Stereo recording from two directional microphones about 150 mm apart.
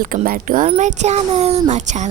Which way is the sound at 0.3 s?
65° right (ahead or behind).